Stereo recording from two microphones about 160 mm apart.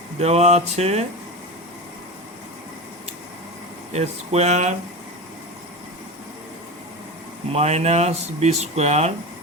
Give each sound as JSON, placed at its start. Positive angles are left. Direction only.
{"t": 0.2, "sound": "speech", "side_deg": -45}
{"t": 3.9, "sound": "speech", "side_deg": -45}
{"t": 7.5, "sound": "speech", "side_deg": -45}